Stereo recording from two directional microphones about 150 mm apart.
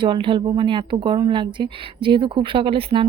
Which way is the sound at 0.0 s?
35° right (ahead or behind).